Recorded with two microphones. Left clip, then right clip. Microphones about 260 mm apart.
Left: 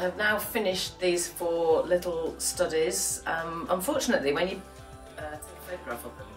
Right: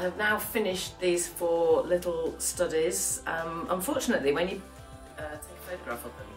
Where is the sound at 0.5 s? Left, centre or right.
Centre.